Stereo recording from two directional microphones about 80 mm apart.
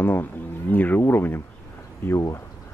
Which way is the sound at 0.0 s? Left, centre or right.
Left.